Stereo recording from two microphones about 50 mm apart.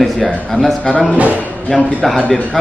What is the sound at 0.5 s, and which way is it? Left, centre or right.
Speech, left.